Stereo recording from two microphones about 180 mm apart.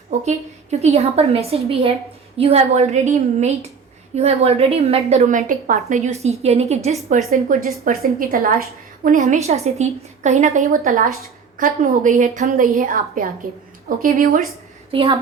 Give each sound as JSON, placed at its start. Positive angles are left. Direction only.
{"t": 0.1, "sound": "a woman's voice", "side_deg": -40}
{"t": 7.3, "sound": "a woman's voice", "side_deg": -50}
{"t": 14.9, "sound": "speech", "side_deg": -25}